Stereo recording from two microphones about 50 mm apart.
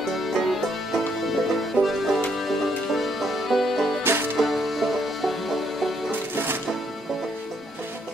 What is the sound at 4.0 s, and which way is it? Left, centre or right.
Music, right.